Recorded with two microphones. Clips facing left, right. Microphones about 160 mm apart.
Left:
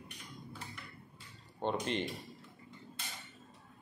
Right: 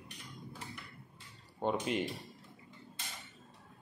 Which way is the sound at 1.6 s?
5° right (ahead or behind).